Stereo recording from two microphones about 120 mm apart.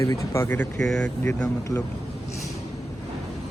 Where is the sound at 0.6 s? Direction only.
5° left (ahead or behind).